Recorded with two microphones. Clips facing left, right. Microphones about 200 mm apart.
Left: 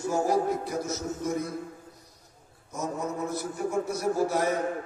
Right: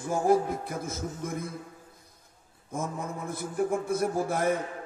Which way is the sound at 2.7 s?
55° right (ahead or behind).